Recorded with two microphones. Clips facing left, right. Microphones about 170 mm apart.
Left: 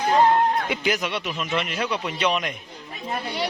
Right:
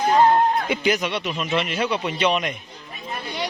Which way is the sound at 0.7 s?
Centre (ahead or behind).